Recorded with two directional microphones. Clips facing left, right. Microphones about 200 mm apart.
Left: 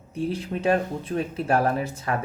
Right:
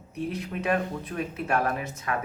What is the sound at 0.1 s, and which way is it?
Speech, 30° left (ahead or behind).